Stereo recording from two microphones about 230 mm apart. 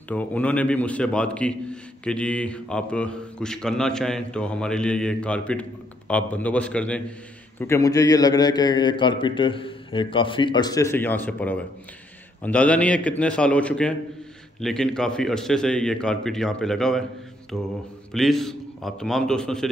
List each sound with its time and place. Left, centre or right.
0.1 s a man's voice: centre